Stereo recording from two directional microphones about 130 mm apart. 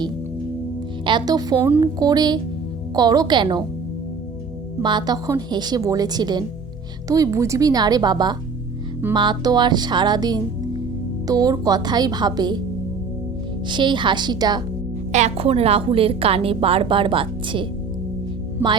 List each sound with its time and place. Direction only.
1.0 s music: 35° right (ahead or behind)
4.8 s music: 35° right (ahead or behind)
7.1 s speech: 25° right (ahead or behind)
9.1 s music: 35° right (ahead or behind)
13.7 s music: 35° right (ahead or behind)
15.1 s a woman's voice: 55° right (ahead or behind)
18.6 s speech: 15° right (ahead or behind)